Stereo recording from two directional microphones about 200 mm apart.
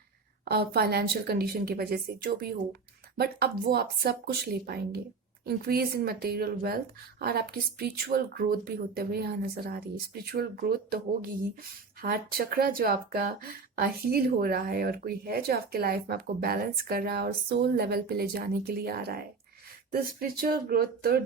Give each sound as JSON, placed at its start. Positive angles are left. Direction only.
{"t": 0.4, "sound": "speech", "side_deg": -50}